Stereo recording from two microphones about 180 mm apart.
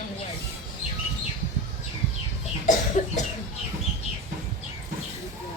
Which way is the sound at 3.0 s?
40° left (ahead or behind).